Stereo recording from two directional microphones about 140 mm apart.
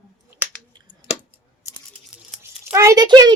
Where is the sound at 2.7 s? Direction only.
20° right (ahead or behind).